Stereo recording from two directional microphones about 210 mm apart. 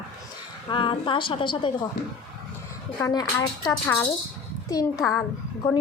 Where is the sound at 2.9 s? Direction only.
15° left (ahead or behind).